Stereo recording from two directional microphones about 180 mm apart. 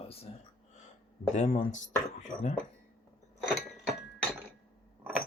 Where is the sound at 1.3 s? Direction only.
40° left (ahead or behind).